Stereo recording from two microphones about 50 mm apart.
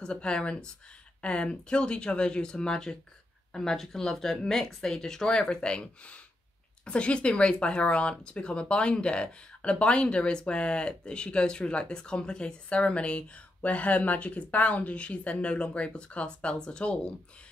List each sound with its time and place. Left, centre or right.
0.0 s speech: centre